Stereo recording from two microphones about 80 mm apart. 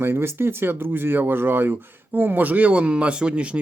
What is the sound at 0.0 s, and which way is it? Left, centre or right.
Speech, right.